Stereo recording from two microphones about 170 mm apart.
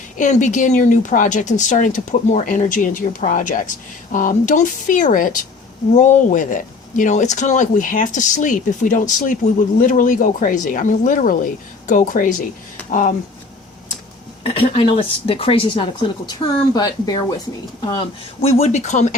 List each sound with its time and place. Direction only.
0.2 s speech: 45° left (ahead or behind)
14.4 s speech: 35° left (ahead or behind)
18.4 s speech: 40° left (ahead or behind)